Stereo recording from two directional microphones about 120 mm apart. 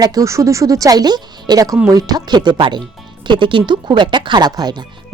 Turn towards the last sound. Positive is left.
turn(degrees=-35)  # may be behind; listen again after turning